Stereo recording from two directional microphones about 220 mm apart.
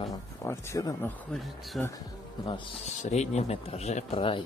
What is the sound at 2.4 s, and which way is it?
Speech, 25° left (ahead or behind).